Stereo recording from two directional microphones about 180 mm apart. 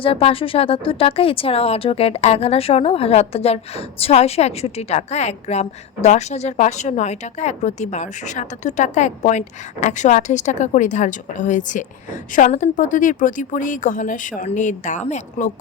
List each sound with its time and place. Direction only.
0.0 s speech: 30° left (ahead or behind)